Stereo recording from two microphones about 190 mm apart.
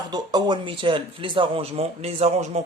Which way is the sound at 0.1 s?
20° right (ahead or behind).